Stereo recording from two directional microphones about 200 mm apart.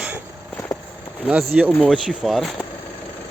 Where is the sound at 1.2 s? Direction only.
5° right (ahead or behind).